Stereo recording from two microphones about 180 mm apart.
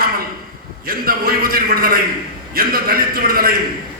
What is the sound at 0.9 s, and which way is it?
A man's voice, 55° right (ahead or behind).